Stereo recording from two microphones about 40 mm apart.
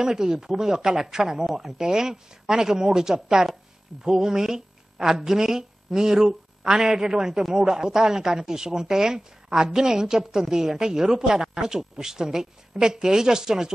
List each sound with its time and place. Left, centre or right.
0.0 s a woman's voice: centre